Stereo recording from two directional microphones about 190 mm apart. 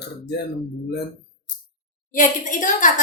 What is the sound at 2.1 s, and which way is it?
Speech, 45° left (ahead or behind).